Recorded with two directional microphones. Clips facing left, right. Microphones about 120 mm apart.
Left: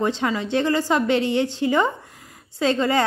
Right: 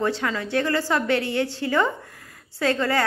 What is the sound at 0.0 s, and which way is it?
A woman's voice, 20° left (ahead or behind).